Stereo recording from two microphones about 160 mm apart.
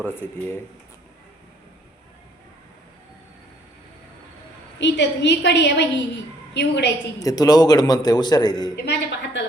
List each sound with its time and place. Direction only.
0.0 s speech: 15° left (ahead or behind)
4.8 s a woman's voice: 90° left
7.2 s a man's voice: 20° left (ahead or behind)
8.8 s a woman's voice: 90° left